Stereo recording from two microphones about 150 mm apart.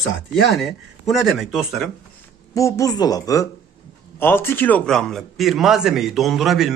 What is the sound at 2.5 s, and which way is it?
A man's voice, 20° left (ahead or behind).